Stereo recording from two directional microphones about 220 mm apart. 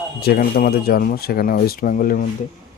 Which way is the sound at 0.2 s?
45° left (ahead or behind).